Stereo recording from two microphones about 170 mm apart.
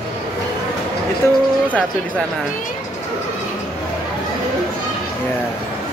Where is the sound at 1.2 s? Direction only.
15° left (ahead or behind).